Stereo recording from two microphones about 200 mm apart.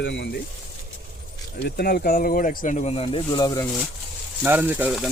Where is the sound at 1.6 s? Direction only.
50° left (ahead or behind); by 3.7 s 20° left (ahead or behind).